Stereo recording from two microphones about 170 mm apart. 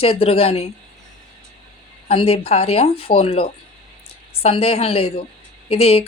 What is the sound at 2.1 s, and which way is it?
Speech, 35° left (ahead or behind).